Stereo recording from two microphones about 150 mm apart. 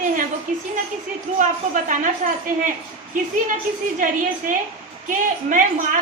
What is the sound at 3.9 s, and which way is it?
A woman's voice, 60° right (ahead or behind).